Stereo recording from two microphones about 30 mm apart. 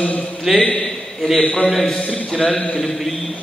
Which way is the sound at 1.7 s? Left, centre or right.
Centre.